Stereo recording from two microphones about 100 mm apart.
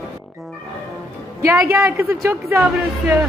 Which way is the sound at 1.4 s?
25° right (ahead or behind).